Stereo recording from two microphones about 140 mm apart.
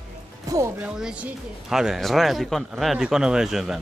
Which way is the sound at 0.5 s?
25° right (ahead or behind).